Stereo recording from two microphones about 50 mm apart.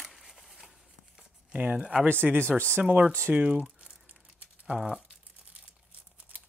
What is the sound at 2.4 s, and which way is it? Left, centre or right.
Speech, left.